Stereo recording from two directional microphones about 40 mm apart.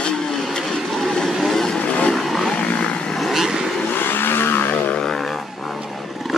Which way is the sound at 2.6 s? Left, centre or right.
Left.